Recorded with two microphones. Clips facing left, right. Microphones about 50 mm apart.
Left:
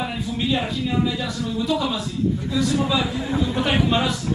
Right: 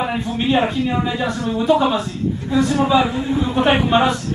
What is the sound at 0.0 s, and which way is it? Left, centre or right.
A man's voice, right.